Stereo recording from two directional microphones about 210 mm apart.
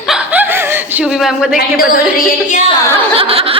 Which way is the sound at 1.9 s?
40° left (ahead or behind).